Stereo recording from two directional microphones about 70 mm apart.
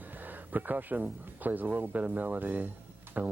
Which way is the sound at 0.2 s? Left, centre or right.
Right.